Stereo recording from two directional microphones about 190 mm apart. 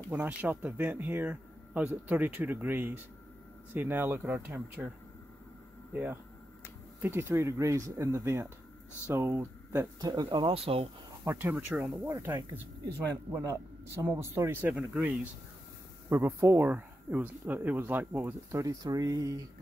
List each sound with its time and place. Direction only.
0.1 s speech: 5° right (ahead or behind)
7.0 s speech: 10° right (ahead or behind); by 10.9 s 30° right (ahead or behind)
11.2 s speech: 10° right (ahead or behind)